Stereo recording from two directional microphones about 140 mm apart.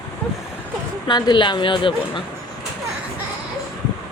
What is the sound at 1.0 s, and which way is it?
A woman's voice, 30° left (ahead or behind).